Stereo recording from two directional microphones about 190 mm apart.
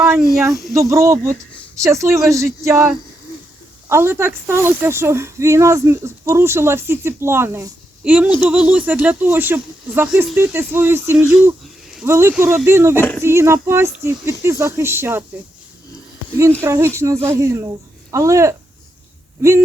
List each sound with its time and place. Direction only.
0.7 s speech: 15° right (ahead or behind)
13.0 s speech: 10° left (ahead or behind)
13.2 s speech: 15° right (ahead or behind)
16.6 s speech: 15° right (ahead or behind)